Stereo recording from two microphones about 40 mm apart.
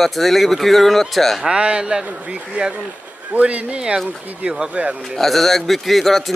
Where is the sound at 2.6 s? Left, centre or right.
Right.